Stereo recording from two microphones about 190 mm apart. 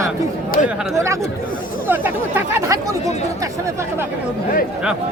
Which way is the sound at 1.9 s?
10° right (ahead or behind).